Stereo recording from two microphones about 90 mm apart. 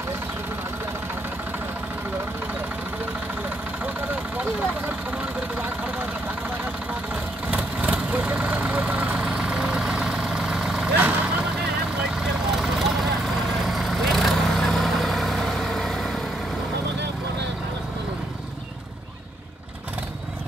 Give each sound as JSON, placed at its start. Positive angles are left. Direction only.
{"t": 3.8, "sound": "vehicle", "side_deg": -20}
{"t": 7.8, "sound": "vehicle", "side_deg": -15}
{"t": 11.0, "sound": "vehicle", "side_deg": -20}
{"t": 12.2, "sound": "vehicle", "side_deg": -5}